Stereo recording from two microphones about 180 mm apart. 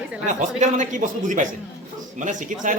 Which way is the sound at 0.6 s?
45° right (ahead or behind).